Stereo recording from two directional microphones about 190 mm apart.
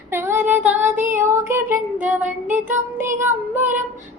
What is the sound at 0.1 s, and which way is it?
Child singing, 10° right (ahead or behind).